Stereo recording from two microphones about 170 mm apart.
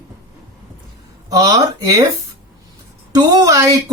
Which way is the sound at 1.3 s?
20° right (ahead or behind).